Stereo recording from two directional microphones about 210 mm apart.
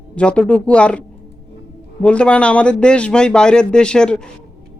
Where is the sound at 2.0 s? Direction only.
5° left (ahead or behind).